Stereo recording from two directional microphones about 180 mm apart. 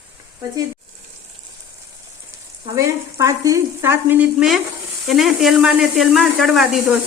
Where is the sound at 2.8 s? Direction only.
20° right (ahead or behind).